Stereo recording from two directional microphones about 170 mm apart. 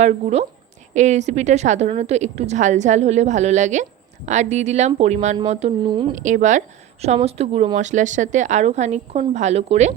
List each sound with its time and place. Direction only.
0.0 s a woman's voice: 40° right (ahead or behind)
5.8 s speech: 25° right (ahead or behind)
6.1 s a woman's voice: 45° right (ahead or behind)